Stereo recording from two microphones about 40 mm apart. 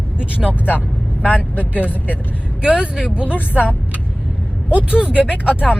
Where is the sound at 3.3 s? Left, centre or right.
Left.